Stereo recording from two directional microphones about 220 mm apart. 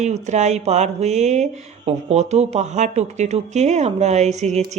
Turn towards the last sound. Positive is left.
turn(degrees=-30)  # may be behind; listen again after turning